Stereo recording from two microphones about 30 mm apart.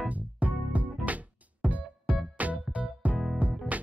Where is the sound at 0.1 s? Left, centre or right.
Right.